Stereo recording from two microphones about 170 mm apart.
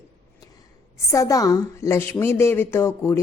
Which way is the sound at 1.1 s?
20° left (ahead or behind).